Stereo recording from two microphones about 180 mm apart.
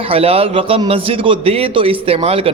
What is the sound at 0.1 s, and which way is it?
A man's voice, 35° right (ahead or behind).